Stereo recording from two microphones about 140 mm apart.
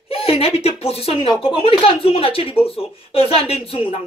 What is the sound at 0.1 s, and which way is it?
Speech, 45° left (ahead or behind).